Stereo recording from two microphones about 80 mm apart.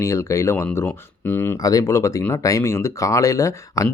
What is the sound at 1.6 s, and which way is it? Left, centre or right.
Speech, left.